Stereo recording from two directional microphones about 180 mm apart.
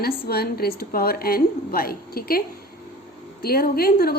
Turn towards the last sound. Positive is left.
turn(degrees=60)  # may be behind; listen again after turning